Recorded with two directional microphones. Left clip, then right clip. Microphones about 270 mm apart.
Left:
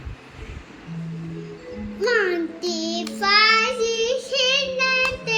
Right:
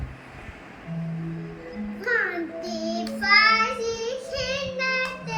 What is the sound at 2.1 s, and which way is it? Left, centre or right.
Child singing, centre.